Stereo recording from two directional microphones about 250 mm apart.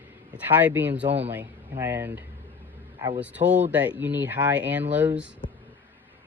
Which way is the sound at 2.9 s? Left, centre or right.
Centre.